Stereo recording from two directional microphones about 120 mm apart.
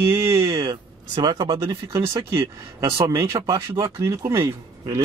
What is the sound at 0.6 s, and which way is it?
Speech, 35° right (ahead or behind).